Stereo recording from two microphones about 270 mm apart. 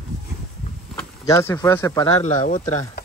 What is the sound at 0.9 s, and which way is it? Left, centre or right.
Speech, centre.